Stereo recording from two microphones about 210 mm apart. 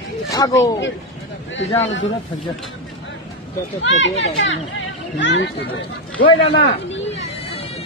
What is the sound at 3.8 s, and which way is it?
Speech, 60° left (ahead or behind).